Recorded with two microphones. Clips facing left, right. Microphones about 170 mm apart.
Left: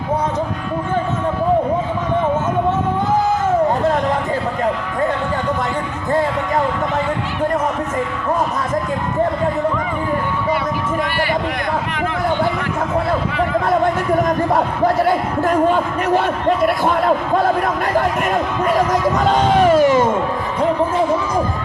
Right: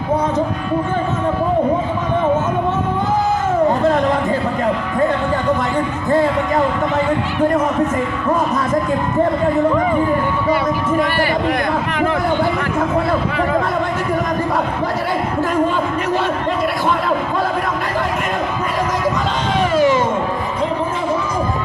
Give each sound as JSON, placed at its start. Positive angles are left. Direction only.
{"t": 15.7, "sound": "speech", "side_deg": 50}
{"t": 19.3, "sound": "speech", "side_deg": 50}